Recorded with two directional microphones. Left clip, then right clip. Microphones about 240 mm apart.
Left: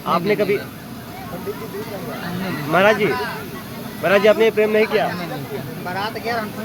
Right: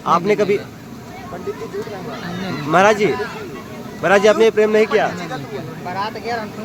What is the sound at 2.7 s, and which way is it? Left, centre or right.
Speech, centre.